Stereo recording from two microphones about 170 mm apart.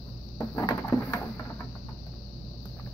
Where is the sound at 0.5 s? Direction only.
20° left (ahead or behind).